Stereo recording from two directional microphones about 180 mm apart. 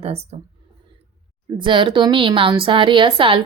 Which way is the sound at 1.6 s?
25° right (ahead or behind).